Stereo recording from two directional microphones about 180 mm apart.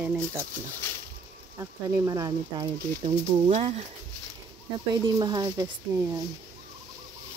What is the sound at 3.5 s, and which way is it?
Speech, 35° right (ahead or behind).